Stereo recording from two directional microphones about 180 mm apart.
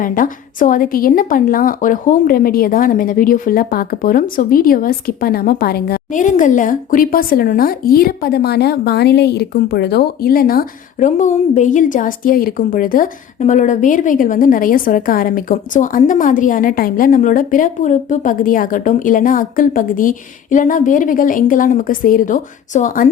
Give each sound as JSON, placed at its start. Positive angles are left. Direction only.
{"t": 0.0, "sound": "a woman's voice", "side_deg": 50}